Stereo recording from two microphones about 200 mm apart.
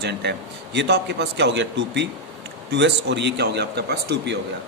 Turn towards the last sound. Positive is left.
turn(degrees=-55)  # may be behind; listen again after turning